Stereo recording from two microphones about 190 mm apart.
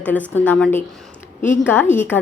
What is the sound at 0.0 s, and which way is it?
Speech, 10° left (ahead or behind).